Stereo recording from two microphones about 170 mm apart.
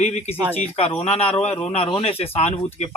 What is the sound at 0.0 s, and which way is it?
Speech, 40° left (ahead or behind).